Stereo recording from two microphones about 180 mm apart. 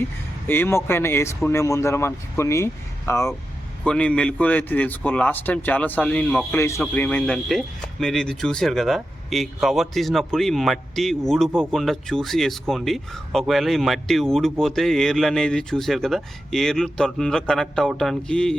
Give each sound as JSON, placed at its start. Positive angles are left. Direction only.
{"t": 0.0, "sound": "a man's voice", "side_deg": 10}